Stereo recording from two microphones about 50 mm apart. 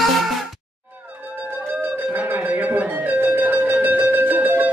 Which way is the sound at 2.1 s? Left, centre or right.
Right.